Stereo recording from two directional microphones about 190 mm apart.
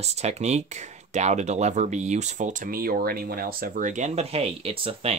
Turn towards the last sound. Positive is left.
turn(degrees=-30)  # may be behind; listen again after turning